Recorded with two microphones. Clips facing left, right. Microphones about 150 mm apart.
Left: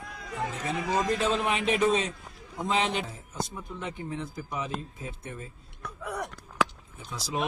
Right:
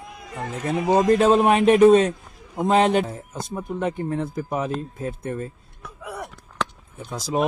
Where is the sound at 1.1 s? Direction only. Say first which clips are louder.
Right 11 dB; 55° right (ahead or behind).